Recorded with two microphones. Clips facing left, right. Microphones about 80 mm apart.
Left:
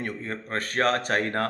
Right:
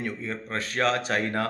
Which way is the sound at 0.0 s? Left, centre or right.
Left.